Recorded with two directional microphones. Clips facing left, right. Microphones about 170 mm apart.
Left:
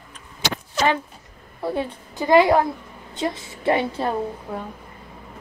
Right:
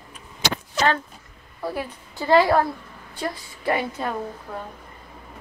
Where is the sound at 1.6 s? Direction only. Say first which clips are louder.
Left 4 dB; 25° left (ahead or behind).